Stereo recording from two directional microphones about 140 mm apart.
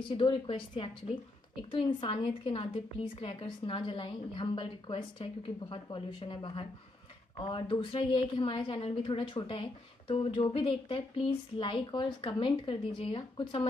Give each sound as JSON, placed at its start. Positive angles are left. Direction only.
{"t": 0.1, "sound": "a woman's voice", "side_deg": 40}